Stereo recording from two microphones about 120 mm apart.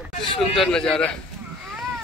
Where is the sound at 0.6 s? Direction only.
5° left (ahead or behind).